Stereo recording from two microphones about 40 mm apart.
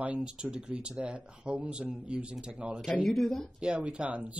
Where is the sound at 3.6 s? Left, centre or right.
Right.